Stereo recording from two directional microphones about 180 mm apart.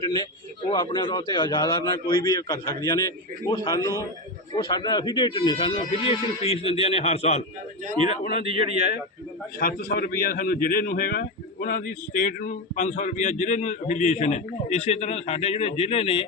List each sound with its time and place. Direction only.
0.7 s a man's voice: 25° left (ahead or behind)